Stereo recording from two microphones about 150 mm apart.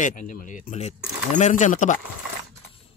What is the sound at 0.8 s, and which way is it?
Speech, 50° left (ahead or behind).